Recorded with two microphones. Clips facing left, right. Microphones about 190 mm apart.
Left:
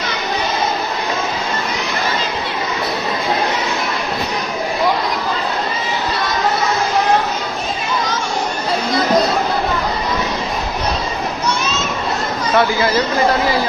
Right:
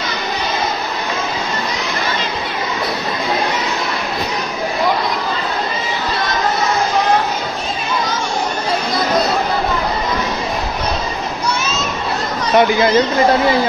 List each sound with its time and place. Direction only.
12.5 s speech: 20° right (ahead or behind)